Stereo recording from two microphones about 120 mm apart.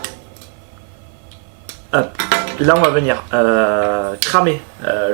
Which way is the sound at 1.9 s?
15° right (ahead or behind).